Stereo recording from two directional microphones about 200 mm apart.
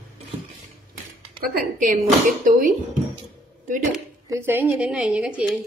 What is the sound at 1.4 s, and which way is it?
Speech, 45° right (ahead or behind).